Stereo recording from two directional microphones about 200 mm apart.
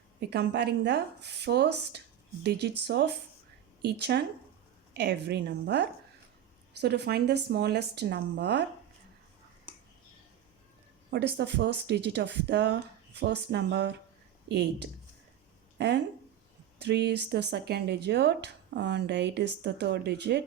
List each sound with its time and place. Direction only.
0.2 s speech: 55° right (ahead or behind)
11.1 s speech: 60° right (ahead or behind)